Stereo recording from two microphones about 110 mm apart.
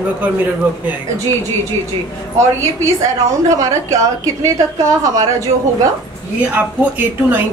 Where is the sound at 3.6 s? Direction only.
30° right (ahead or behind).